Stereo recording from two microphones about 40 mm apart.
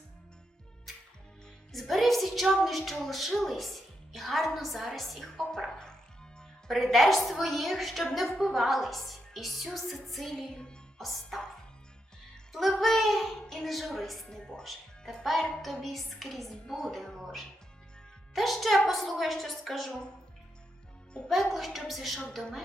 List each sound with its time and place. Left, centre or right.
1.7 s a woman's voice: centre
5.4 s a sound: centre
6.7 s a woman's voice: centre
10.3 s speech: left
10.9 s music: centre
12.8 s a woman's voice: centre
14.3 s a woman's voice: centre
14.6 s a woman's voice: centre
21.2 s a woman's voice: centre